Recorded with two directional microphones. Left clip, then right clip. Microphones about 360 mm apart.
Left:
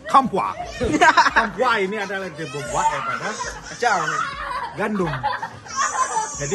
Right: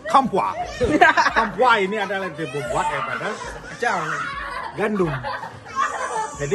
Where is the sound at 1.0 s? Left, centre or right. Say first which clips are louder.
Left 2 dB; left.